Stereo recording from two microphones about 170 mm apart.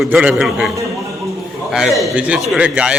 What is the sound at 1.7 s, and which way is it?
A man's voice, centre (ahead or behind).